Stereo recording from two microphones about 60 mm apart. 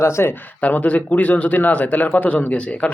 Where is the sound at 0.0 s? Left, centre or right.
Left.